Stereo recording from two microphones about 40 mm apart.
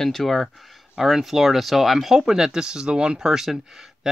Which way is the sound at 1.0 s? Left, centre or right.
Centre.